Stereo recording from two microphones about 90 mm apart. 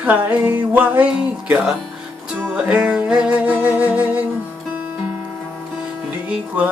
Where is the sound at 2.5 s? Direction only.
10° right (ahead or behind).